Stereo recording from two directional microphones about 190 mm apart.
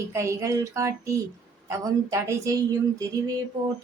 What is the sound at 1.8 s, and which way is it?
A woman's voice, 15° right (ahead or behind).